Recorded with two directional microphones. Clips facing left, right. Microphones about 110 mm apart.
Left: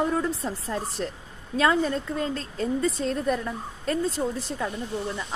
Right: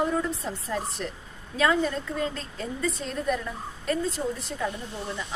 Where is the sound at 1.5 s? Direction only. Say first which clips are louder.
Left 2 dB; 35° left (ahead or behind).